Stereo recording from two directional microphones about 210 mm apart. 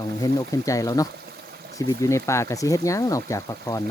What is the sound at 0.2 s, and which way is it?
Speech, 15° left (ahead or behind).